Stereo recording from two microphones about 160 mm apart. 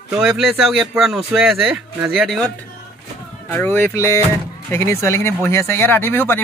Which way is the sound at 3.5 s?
10° left (ahead or behind).